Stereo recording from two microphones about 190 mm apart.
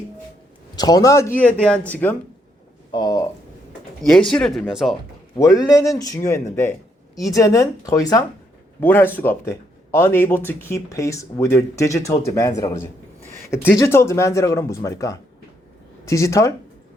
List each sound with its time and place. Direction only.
0.8 s speech: 20° left (ahead or behind)
2.9 s speech: 20° left (ahead or behind)
4.0 s speech: 5° left (ahead or behind)
5.4 s speech: 20° left (ahead or behind)